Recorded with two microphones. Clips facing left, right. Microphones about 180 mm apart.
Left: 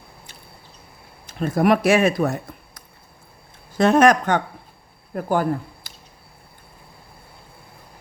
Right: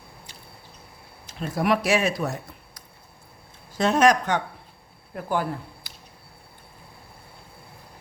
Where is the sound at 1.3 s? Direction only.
50° left (ahead or behind).